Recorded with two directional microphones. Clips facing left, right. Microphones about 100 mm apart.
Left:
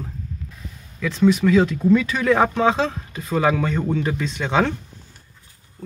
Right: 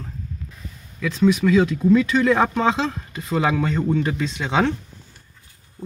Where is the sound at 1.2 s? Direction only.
10° left (ahead or behind).